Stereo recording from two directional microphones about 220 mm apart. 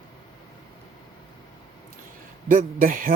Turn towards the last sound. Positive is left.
turn(degrees=-40)  # may be behind; listen again after turning